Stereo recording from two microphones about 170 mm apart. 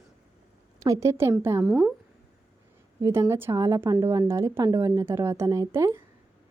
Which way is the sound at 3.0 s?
15° right (ahead or behind).